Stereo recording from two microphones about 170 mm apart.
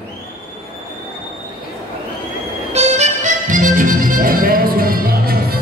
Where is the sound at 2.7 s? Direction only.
40° right (ahead or behind).